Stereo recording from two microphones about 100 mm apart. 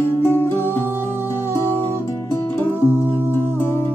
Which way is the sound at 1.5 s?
25° left (ahead or behind).